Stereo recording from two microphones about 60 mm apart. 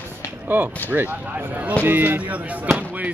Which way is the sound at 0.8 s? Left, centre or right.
Right.